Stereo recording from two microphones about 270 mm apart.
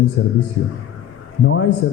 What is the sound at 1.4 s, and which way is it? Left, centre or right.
Speech, left.